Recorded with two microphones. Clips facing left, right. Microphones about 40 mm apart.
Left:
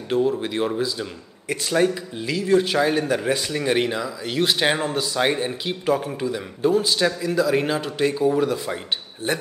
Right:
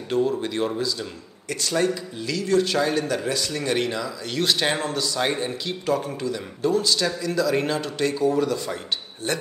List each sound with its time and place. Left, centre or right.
0.1 s a man's voice: centre